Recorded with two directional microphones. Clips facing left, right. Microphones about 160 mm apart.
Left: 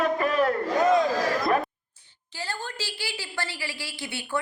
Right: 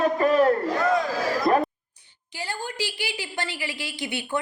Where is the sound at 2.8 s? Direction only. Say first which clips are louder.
Right 4 dB; 15° right (ahead or behind).